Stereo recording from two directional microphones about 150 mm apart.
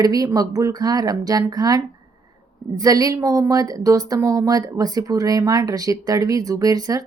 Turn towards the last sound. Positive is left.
turn(degrees=-25)  # may be behind; listen again after turning